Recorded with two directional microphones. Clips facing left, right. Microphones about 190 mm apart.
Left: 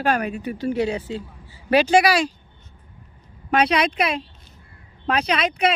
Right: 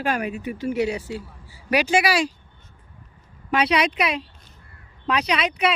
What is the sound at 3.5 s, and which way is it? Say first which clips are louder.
Speech: left 2 dB; 45° left (ahead or behind).